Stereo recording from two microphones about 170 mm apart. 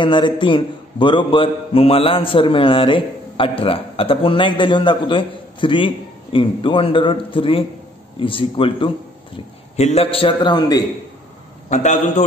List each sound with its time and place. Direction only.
0.0 s a man's voice: 30° left (ahead or behind)
11.7 s a man's voice: 45° left (ahead or behind)